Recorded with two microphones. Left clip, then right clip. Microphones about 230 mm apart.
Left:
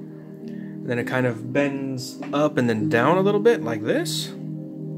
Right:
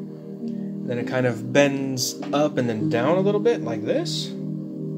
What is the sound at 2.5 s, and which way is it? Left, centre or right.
Speech, centre.